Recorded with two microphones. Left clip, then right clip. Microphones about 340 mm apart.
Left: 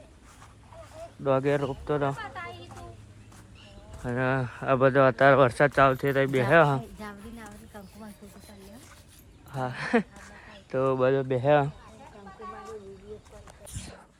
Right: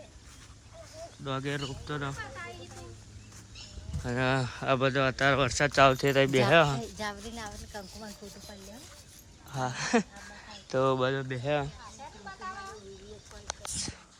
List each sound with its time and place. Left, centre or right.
1.2 s speech: centre
4.0 s speech: centre
7.0 s a sound: right
9.5 s speech: centre
11.3 s speech: centre